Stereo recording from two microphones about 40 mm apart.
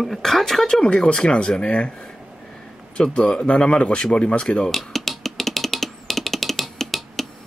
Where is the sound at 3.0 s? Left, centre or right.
Left.